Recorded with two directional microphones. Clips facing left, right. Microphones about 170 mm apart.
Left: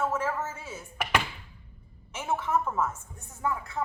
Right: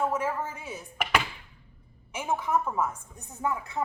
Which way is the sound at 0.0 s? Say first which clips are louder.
Right 1 dB; 15° right (ahead or behind).